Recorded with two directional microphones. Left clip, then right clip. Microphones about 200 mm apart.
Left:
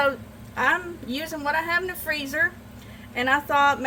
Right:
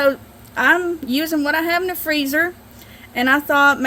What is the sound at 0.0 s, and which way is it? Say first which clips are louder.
Speech: right 6 dB; 60° right (ahead or behind).